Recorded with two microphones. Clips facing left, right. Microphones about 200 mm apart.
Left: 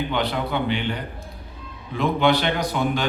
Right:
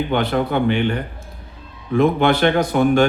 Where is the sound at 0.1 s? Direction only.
50° right (ahead or behind).